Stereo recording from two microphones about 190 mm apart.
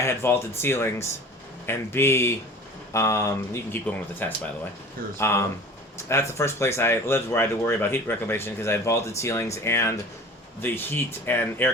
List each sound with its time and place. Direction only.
0.0 s speech: 15° left (ahead or behind)